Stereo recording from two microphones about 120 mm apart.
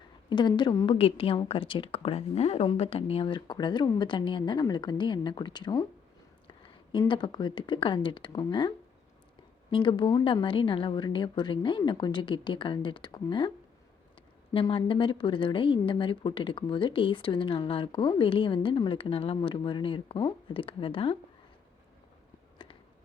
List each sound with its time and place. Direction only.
0.3 s a woman's voice: 40° left (ahead or behind)
0.9 s a woman's voice: 55° left (ahead or behind)
7.1 s a woman's voice: 40° left (ahead or behind)
9.7 s a woman's voice: 40° left (ahead or behind)
14.5 s speech: 50° left (ahead or behind)
22.5 s a sound: 45° left (ahead or behind)